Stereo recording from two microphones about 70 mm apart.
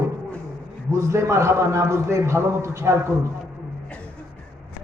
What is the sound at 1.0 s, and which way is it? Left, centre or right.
A man's voice, right.